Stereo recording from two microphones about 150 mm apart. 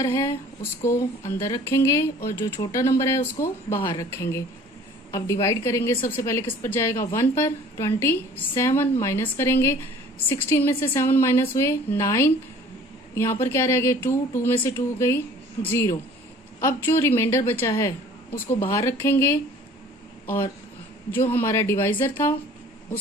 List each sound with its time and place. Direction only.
0.0 s a woman's voice: 20° left (ahead or behind)
13.4 s a woman's voice: 15° left (ahead or behind)